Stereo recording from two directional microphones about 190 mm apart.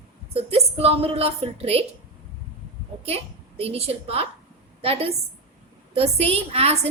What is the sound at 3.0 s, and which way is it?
A woman's voice, 30° right (ahead or behind).